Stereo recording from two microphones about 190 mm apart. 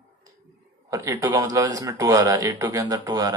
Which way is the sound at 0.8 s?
15° right (ahead or behind).